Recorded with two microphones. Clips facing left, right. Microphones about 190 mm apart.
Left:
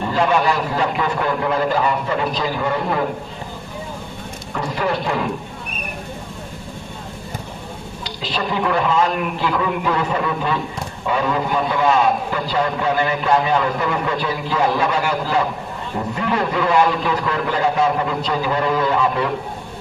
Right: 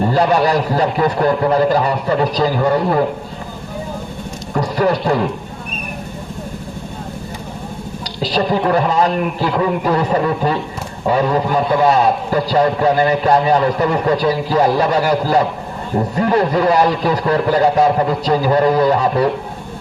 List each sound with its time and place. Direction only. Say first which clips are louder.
0.0 s a man's voice: right 4 dB; 40° right (ahead or behind)
4.5 s a man's voice: right 6 dB; 40° right (ahead or behind)
8.2 s a man's voice: right 6 dB; 40° right (ahead or behind)